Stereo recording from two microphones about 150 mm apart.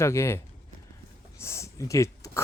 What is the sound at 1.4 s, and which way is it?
Speech, 20° left (ahead or behind).